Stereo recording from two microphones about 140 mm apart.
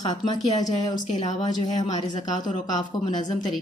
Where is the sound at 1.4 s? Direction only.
30° left (ahead or behind).